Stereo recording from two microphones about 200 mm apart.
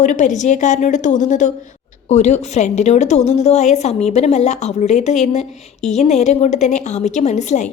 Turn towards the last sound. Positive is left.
turn(degrees=35)  # may be behind; listen again after turning